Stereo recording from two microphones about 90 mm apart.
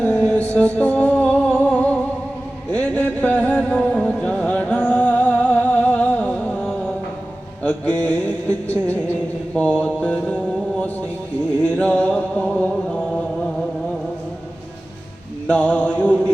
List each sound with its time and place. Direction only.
0.0 s music: 10° left (ahead or behind)
9.6 s mantra: 15° left (ahead or behind)
11.6 s a sound: 15° left (ahead or behind)
15.4 s music: 15° left (ahead or behind)